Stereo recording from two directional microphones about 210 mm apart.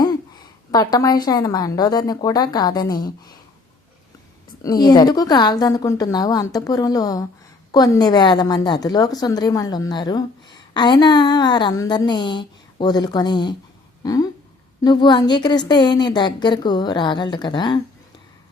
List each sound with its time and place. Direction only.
0.0 s a woman's voice: 20° left (ahead or behind)
4.6 s a woman's voice: 20° left (ahead or behind)
14.0 s a sound: 15° left (ahead or behind)
14.8 s a woman's voice: 20° left (ahead or behind)